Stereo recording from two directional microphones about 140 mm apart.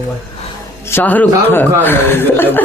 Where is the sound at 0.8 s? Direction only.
15° left (ahead or behind).